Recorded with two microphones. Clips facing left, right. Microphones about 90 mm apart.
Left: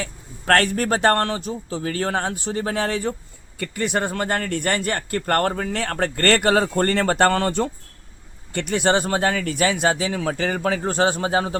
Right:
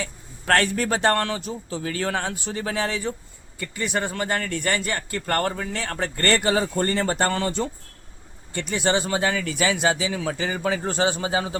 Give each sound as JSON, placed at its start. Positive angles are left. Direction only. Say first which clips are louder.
{"t": 0.0, "sound": "a man's voice", "louder": "left 2 dB", "side_deg": 45}